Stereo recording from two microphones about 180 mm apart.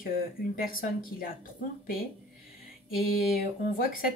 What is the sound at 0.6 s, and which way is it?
Speech, 55° left (ahead or behind).